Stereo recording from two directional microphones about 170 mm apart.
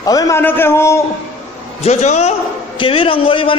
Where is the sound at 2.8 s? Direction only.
30° left (ahead or behind).